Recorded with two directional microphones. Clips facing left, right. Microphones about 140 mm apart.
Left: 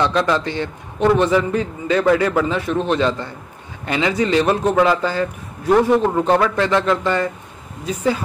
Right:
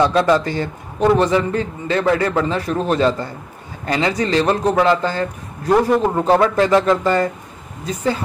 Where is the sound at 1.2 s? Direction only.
30° right (ahead or behind).